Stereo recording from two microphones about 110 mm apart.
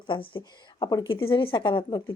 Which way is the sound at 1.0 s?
50° left (ahead or behind).